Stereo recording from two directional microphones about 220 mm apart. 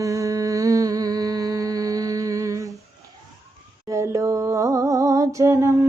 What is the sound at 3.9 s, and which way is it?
Music, 15° right (ahead or behind).